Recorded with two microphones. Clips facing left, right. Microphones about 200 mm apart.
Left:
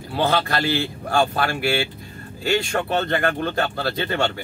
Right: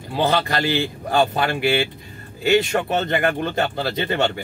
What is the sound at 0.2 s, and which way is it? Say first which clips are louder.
A man's voice: right 1 dB; 15° right (ahead or behind).